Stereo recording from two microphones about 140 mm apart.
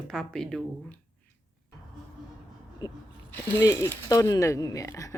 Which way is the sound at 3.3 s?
15° left (ahead or behind).